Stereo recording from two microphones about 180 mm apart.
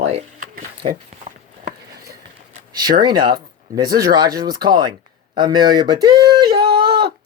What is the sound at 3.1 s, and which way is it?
Speech, 25° right (ahead or behind).